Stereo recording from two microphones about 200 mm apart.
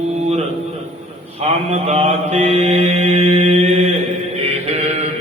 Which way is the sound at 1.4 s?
30° right (ahead or behind).